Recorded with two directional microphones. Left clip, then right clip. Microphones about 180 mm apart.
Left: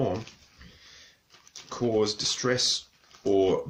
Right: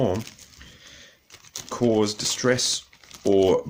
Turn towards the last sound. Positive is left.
turn(degrees=-50)  # may be behind; listen again after turning